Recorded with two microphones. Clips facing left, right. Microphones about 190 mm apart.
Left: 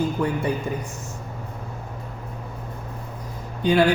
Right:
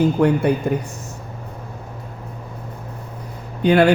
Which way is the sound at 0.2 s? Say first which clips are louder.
Right 7 dB; 65° right (ahead or behind).